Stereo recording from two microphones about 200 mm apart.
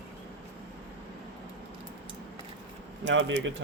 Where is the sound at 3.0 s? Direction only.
70° right (ahead or behind).